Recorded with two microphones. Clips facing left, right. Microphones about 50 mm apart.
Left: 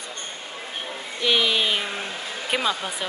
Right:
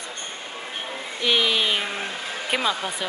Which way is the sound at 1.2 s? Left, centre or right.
Centre.